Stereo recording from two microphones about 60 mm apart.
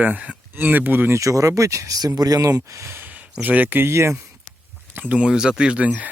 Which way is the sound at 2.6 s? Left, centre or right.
Right.